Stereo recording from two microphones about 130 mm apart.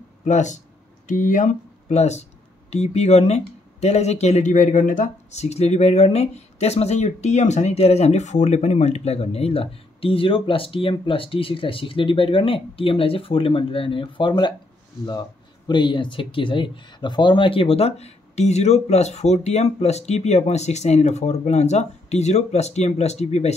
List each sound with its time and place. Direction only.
0.3 s speech: 65° left (ahead or behind)
1.0 s speech: 85° left; by 23.5 s 55° left (ahead or behind)